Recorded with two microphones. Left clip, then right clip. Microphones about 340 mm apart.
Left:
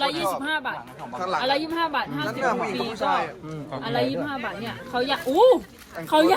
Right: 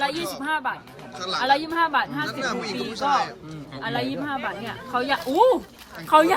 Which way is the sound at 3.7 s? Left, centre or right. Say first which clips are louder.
Left 2 dB; centre.